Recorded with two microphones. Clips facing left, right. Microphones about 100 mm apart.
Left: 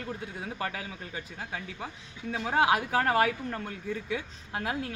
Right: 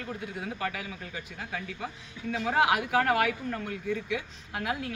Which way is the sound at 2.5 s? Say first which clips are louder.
Even; 30° left (ahead or behind).